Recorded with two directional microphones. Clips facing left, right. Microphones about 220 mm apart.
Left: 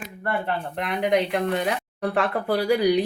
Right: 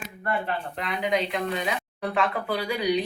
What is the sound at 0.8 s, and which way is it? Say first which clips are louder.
Speech: left 5 dB; 65° left (ahead or behind).